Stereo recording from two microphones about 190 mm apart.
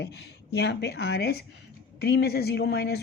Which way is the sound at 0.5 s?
60° left (ahead or behind).